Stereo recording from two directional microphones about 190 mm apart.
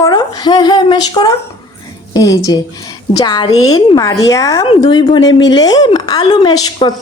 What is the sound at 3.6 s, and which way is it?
Speech, 90° left.